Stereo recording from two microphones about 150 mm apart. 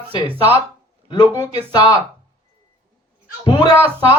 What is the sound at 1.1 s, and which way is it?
Speech, 30° left (ahead or behind).